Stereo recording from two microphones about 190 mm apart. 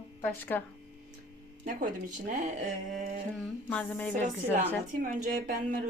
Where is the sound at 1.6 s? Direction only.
45° right (ahead or behind).